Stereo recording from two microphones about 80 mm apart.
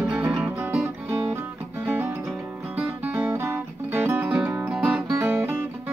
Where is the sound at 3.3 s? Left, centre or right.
Right.